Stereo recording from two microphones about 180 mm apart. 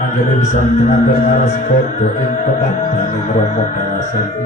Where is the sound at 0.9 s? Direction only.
40° left (ahead or behind).